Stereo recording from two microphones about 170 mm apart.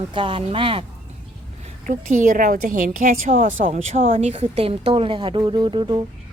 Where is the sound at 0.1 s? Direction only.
30° right (ahead or behind).